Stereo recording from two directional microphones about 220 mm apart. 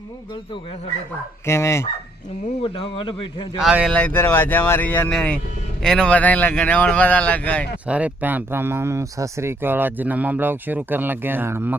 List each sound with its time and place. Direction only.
1.5 s speech: 10° left (ahead or behind)
2.7 s a man's voice: 25° left (ahead or behind)
3.6 s speech: centre (ahead or behind)
7.9 s speech: 5° right (ahead or behind)